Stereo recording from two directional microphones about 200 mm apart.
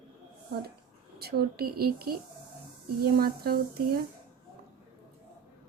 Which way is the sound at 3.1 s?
50° right (ahead or behind).